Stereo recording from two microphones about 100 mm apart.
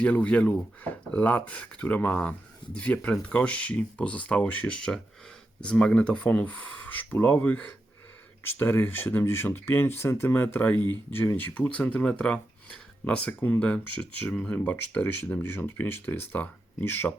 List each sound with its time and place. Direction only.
0.0 s speech: 10° left (ahead or behind)